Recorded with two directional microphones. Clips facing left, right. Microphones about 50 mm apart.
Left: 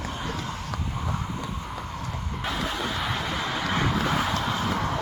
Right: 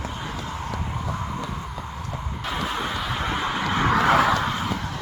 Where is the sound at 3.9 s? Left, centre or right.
Right.